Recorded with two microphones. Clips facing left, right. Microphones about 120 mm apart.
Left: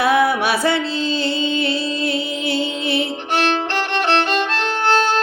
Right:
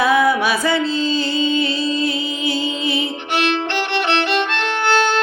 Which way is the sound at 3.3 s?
40° left (ahead or behind).